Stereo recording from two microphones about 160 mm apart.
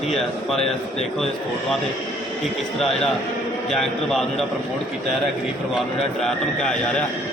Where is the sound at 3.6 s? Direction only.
Centre (ahead or behind).